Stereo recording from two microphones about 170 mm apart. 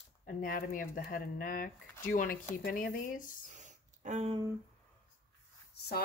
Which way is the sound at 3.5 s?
45° right (ahead or behind).